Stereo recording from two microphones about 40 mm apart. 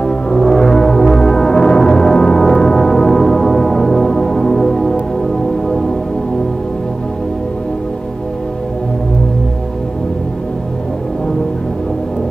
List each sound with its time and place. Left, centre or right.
0.0 s music: centre